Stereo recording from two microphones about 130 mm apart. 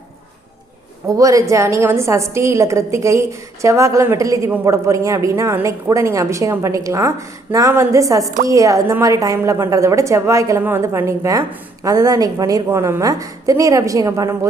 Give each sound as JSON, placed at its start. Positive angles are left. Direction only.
{"t": 1.0, "sound": "a woman's voice", "side_deg": -25}